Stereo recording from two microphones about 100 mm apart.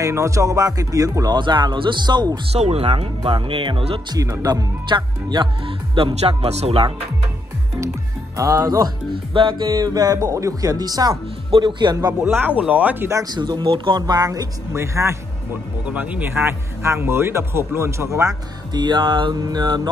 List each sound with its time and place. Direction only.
0.0 s speech: 30° right (ahead or behind)
1.4 s speech: 50° right (ahead or behind)
2.5 s speech: 85° right
3.3 s speech: 65° right (ahead or behind)
4.1 s speech: 35° right (ahead or behind)
4.8 s speech: 50° right (ahead or behind); by 6.9 s 80° right
8.4 s speech: 35° right (ahead or behind)
9.3 s speech: 55° right (ahead or behind)
12.2 s speech: 20° right (ahead or behind)
13.1 s speech: 40° right (ahead or behind)
15.8 s speech: 15° right (ahead or behind); by 18.3 s 30° right (ahead or behind)
18.7 s speech: 50° right (ahead or behind)